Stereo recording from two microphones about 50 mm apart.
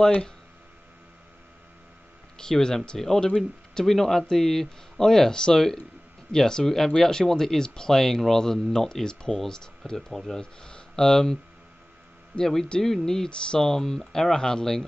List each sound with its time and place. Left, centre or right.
0.0 s speech: centre
2.3 s speech: centre
10.4 s speech: centre
12.4 s speech: centre